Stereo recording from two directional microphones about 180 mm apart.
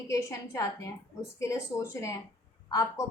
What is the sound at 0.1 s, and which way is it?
A woman's voice, 15° left (ahead or behind).